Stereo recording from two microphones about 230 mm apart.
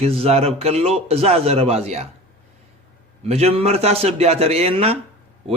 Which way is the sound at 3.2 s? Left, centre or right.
Right.